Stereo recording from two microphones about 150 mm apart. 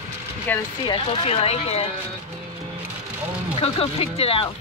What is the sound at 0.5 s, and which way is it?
Speech, 10° left (ahead or behind).